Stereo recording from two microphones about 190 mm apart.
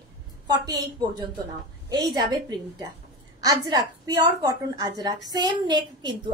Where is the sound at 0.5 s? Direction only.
20° right (ahead or behind).